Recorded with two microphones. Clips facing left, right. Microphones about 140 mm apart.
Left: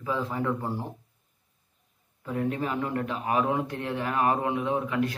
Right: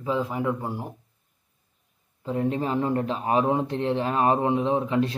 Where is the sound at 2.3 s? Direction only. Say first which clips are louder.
Right 3 dB; 25° right (ahead or behind).